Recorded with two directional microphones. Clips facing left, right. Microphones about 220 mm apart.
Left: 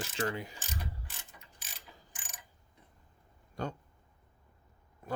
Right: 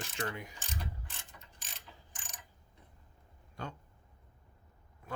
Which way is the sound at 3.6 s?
40° left (ahead or behind).